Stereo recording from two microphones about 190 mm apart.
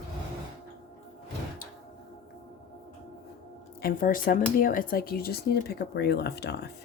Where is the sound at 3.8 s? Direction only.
45° left (ahead or behind).